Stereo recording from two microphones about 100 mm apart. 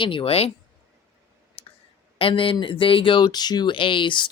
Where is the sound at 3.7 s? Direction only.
60° left (ahead or behind).